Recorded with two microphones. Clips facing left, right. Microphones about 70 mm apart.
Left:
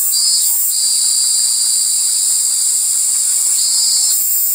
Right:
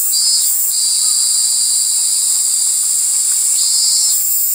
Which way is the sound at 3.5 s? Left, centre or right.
Left.